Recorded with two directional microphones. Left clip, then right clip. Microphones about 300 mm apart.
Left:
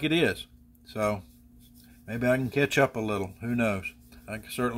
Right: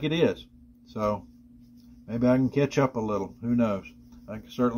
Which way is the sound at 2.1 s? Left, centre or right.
Centre.